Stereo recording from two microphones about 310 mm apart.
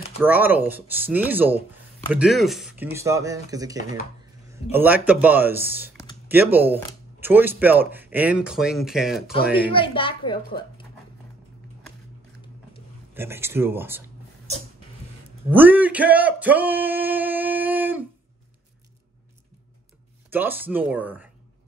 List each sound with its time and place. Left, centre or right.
0.2 s speech: centre
9.7 s a woman's voice: centre
13.1 s speech: centre
15.5 s speech: centre
20.2 s speech: centre